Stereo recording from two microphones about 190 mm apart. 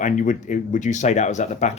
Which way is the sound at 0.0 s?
40° left (ahead or behind).